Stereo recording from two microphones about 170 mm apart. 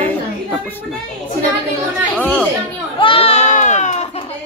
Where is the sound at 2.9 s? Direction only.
30° left (ahead or behind).